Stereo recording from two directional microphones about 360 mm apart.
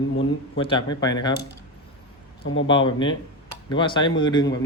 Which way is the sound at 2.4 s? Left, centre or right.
Left.